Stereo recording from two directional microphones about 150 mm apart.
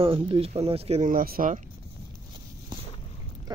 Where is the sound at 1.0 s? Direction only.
75° right (ahead or behind).